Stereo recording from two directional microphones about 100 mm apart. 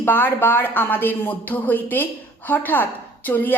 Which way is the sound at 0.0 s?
20° left (ahead or behind).